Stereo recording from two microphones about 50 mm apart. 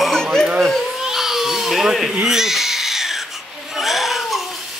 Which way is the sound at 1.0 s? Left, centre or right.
Centre.